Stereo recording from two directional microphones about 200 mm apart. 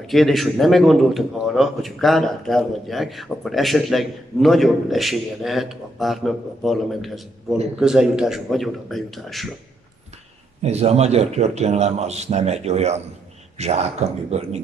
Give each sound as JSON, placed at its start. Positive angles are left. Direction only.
{"t": 0.0, "sound": "a man's voice", "side_deg": 0}
{"t": 10.6, "sound": "a man's voice", "side_deg": -30}